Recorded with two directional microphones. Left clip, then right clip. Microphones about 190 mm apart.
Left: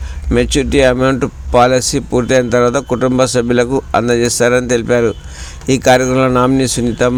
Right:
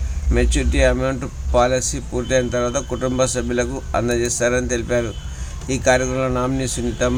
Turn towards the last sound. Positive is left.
turn(degrees=35)  # may be behind; listen again after turning